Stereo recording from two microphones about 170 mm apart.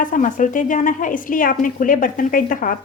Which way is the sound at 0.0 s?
50° left (ahead or behind).